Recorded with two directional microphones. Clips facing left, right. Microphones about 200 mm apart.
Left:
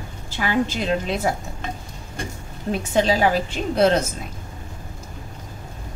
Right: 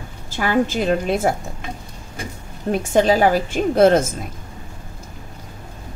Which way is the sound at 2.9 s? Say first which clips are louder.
Right 4 dB; 45° right (ahead or behind).